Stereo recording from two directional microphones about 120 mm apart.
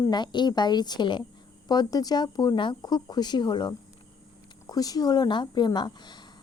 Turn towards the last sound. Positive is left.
turn(degrees=40)  # may be behind; listen again after turning